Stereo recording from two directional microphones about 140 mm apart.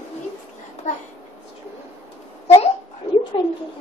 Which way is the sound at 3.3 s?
35° left (ahead or behind).